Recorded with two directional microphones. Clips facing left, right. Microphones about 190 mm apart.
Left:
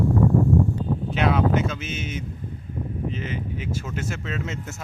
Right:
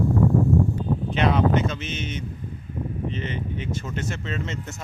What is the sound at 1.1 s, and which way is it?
Speech, 5° left (ahead or behind).